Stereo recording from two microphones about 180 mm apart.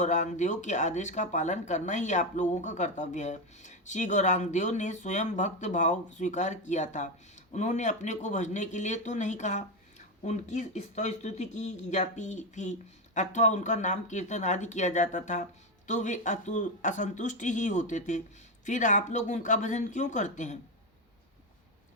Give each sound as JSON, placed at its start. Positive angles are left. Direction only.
{"t": 0.0, "sound": "speech", "side_deg": 40}